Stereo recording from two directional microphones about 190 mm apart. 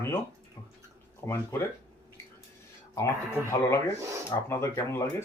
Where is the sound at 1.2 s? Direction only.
10° left (ahead or behind).